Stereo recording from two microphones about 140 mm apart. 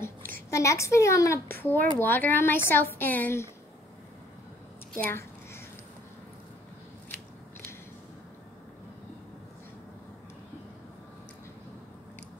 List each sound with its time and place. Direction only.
0.0 s speech: 20° left (ahead or behind)